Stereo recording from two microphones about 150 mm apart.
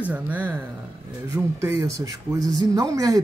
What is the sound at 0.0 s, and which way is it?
Speech, 10° right (ahead or behind).